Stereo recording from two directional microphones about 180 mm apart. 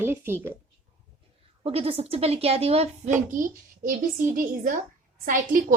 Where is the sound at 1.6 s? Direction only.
30° right (ahead or behind).